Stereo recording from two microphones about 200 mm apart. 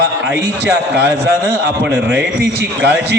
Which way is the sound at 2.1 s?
55° right (ahead or behind).